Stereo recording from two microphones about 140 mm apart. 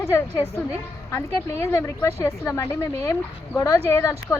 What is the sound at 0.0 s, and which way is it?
Speech, 20° left (ahead or behind).